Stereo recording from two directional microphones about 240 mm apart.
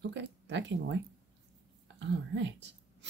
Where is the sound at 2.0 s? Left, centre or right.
Right.